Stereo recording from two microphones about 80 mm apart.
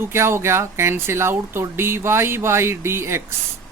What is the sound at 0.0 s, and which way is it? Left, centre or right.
Speech, right.